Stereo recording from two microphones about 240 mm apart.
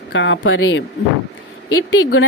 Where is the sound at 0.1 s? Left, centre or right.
Left.